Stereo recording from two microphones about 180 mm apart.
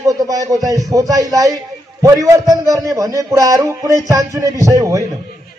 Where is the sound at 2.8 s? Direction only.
20° right (ahead or behind).